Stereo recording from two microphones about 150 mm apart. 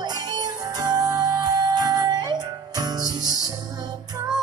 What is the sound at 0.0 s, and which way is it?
Music, 25° right (ahead or behind).